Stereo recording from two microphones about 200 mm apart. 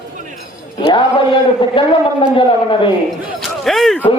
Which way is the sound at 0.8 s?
25° left (ahead or behind).